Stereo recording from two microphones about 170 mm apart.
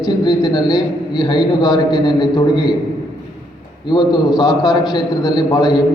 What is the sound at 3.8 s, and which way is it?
A man's voice, 25° left (ahead or behind).